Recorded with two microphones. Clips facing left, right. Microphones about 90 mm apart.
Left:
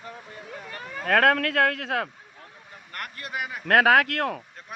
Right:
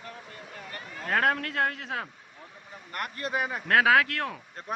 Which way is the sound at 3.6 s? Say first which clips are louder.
Left 3 dB; 50° left (ahead or behind).